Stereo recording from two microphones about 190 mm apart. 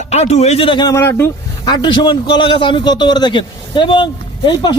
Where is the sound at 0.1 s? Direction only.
35° left (ahead or behind).